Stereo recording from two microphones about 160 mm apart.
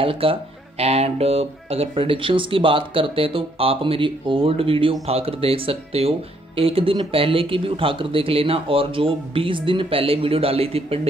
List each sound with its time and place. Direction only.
0.0 s speech: 35° right (ahead or behind)